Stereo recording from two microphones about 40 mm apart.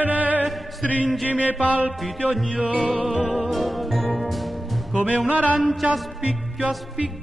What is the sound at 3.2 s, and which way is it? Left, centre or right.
Music, centre.